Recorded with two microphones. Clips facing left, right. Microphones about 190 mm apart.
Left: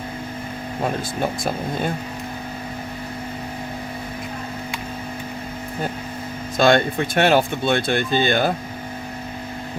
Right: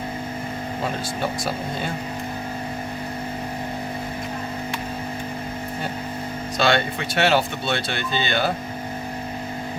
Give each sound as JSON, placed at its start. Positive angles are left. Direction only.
{"t": 6.6, "sound": "speech", "side_deg": 50}